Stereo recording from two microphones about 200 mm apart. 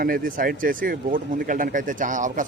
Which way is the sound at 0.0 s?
45° right (ahead or behind).